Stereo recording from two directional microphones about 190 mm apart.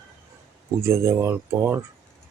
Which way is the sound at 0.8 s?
15° right (ahead or behind).